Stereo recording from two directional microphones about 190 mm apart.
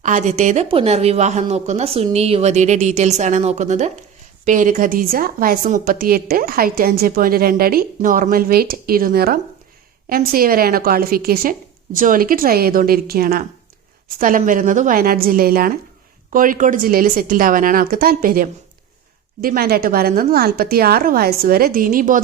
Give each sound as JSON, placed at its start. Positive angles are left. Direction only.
{"t": 0.0, "sound": "a woman's voice", "side_deg": -40}